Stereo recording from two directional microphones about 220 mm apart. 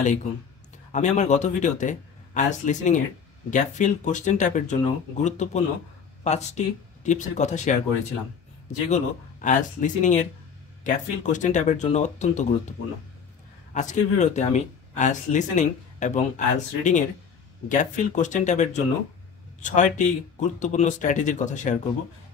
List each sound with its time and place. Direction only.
0.0 s speech: 30° left (ahead or behind)
8.8 s speech: 35° left (ahead or behind)
13.7 s speech: 35° left (ahead or behind)